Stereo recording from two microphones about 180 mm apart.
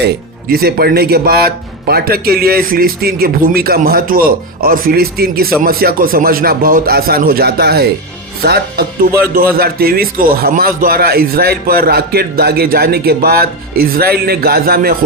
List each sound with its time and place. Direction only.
0.0 s a man's voice: 60° right (ahead or behind)